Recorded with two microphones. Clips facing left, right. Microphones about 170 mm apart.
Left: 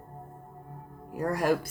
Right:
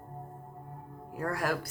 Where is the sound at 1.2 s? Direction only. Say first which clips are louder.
Left 5 dB; 15° left (ahead or behind).